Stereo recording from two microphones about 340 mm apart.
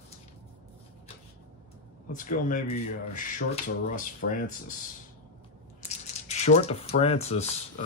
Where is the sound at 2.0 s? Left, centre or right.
Left.